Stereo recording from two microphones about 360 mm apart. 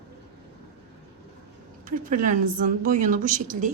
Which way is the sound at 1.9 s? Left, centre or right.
Right.